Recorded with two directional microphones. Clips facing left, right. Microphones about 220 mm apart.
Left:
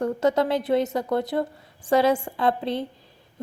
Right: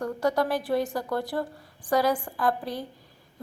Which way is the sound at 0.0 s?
25° left (ahead or behind).